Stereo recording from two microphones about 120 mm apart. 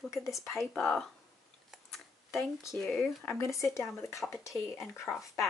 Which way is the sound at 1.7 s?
Centre (ahead or behind).